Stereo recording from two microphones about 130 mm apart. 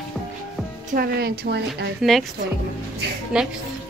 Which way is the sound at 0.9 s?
90° right.